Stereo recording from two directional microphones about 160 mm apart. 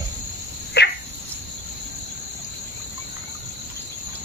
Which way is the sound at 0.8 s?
90° left.